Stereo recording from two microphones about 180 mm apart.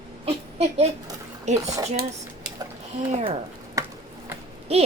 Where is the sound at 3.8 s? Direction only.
15° right (ahead or behind).